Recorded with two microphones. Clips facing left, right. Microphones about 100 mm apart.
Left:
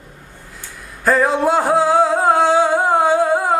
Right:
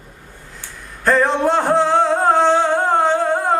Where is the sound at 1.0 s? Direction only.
5° left (ahead or behind).